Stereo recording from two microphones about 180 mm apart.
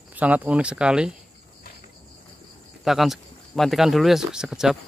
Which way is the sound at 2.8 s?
Centre (ahead or behind).